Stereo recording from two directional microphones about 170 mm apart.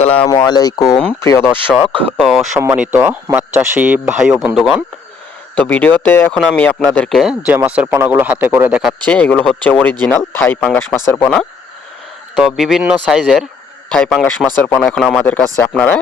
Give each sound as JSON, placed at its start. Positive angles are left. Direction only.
{"t": 0.0, "sound": "speech", "side_deg": 35}
{"t": 0.3, "sound": "speech", "side_deg": 20}
{"t": 2.1, "sound": "speech", "side_deg": 0}
{"t": 5.5, "sound": "speech", "side_deg": 10}
{"t": 8.8, "sound": "speech", "side_deg": 10}